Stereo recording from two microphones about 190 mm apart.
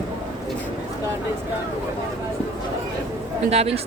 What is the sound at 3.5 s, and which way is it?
Speech, 30° right (ahead or behind).